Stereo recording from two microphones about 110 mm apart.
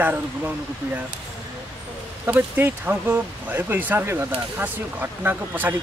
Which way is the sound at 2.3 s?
20° right (ahead or behind).